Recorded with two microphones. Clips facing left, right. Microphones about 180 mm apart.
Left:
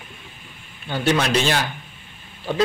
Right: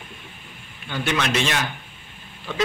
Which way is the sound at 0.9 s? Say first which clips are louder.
Left 4 dB; 35° left (ahead or behind).